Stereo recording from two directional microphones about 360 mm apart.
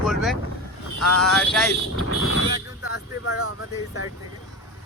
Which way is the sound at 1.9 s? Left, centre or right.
Left.